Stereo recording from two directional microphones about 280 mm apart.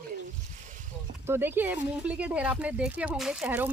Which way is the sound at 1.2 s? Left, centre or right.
Centre.